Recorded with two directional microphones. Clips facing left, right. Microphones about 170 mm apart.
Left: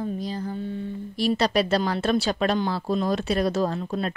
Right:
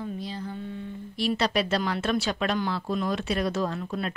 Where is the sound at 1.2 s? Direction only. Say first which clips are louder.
Left 3 dB; 40° left (ahead or behind).